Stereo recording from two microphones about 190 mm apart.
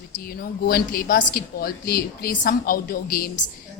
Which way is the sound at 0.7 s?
50° left (ahead or behind).